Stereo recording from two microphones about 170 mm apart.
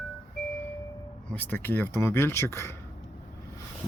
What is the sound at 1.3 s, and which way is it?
Speech, 10° left (ahead or behind).